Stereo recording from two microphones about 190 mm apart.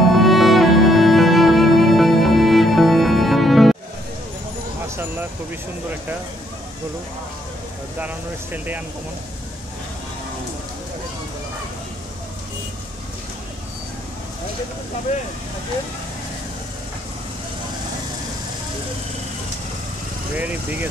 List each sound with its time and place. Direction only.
0.1 s music: centre (ahead or behind)
4.8 s vehicle: 10° right (ahead or behind)
8.0 s speech: 10° right (ahead or behind)
20.3 s speech: 10° right (ahead or behind)